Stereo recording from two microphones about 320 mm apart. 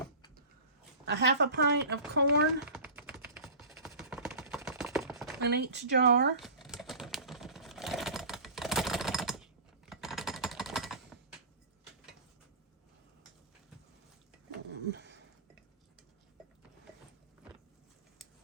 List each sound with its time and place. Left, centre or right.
1.0 s speech: right
2.6 s typing: centre
5.4 s speech: right
6.4 s typing: centre
14.7 s a sound: right